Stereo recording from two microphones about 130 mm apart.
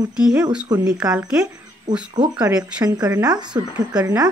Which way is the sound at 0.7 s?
30° right (ahead or behind).